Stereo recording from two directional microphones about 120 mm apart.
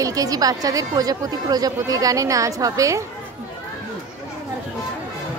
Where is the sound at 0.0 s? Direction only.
30° right (ahead or behind).